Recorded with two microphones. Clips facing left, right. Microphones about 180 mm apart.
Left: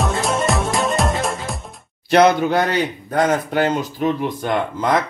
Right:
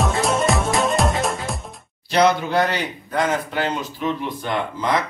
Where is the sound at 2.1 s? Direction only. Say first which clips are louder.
Left 4 dB; 55° left (ahead or behind).